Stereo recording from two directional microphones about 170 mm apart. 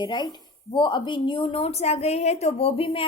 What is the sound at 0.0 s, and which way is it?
A woman's voice, 25° left (ahead or behind).